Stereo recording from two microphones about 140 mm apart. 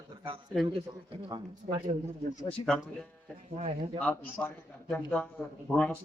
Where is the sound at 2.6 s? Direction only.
5° left (ahead or behind).